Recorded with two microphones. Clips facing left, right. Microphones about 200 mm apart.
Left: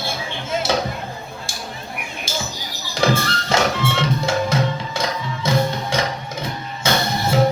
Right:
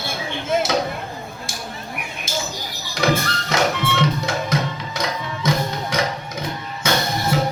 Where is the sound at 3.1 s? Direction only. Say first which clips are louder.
Left 1 dB; 25° left (ahead or behind).